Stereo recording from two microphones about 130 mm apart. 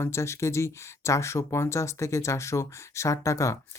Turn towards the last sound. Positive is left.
turn(degrees=25)  # may be behind; listen again after turning